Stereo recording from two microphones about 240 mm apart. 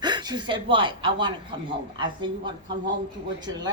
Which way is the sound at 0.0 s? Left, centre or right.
Centre.